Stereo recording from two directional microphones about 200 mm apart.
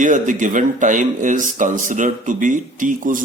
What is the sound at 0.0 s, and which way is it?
Speech, 40° right (ahead or behind).